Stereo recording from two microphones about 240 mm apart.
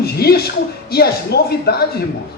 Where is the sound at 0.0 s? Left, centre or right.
Left.